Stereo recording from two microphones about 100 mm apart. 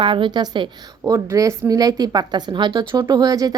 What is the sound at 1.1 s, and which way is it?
A woman's voice, 30° right (ahead or behind).